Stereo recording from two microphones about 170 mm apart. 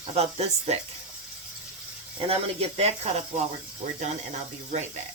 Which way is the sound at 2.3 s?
35° right (ahead or behind).